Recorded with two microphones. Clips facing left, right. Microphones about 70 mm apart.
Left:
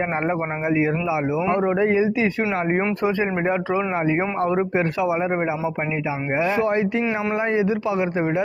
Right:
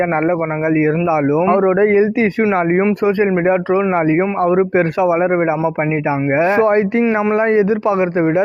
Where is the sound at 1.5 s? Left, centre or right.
Right.